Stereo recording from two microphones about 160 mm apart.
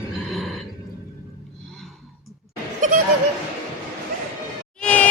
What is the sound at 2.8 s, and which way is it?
Laughter, 55° right (ahead or behind).